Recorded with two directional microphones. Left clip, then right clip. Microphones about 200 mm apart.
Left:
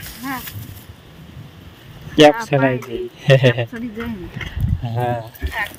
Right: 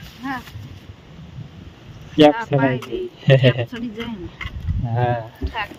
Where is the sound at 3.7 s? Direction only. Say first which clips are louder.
Left 1 dB; 5° right (ahead or behind).